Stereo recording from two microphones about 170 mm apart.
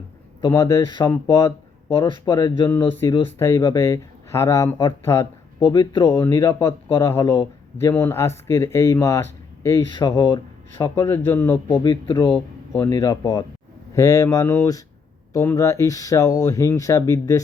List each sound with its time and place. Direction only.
0.4 s speech: 15° left (ahead or behind)
2.0 s speech: 30° left (ahead or behind)
2.6 s speech: 10° left (ahead or behind)
5.7 s speech: 25° left (ahead or behind)
6.2 s speech: 15° left (ahead or behind)
10.8 s speech: 15° left (ahead or behind)
11.8 s speech: 30° left (ahead or behind)